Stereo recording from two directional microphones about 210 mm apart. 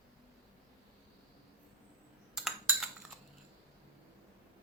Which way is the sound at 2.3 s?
Centre (ahead or behind).